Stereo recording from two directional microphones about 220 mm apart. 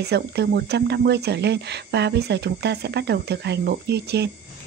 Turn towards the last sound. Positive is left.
turn(degrees=-50)  # may be behind; listen again after turning